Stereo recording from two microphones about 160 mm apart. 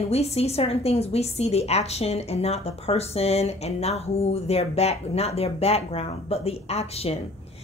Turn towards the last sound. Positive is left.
turn(degrees=40)  # may be behind; listen again after turning